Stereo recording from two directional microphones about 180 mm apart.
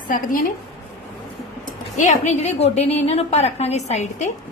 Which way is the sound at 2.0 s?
40° left (ahead or behind).